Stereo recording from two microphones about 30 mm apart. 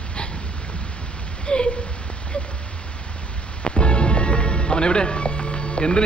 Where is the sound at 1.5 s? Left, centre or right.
Left.